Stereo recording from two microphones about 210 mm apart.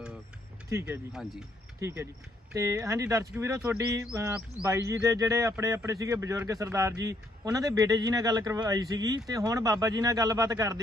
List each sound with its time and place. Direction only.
0.7 s speech: 15° right (ahead or behind)
1.1 s speech: centre (ahead or behind)
1.8 s speech: 15° right (ahead or behind)